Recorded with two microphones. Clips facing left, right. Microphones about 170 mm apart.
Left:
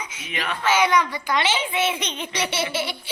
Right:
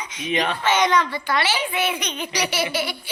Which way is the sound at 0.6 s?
5° left (ahead or behind).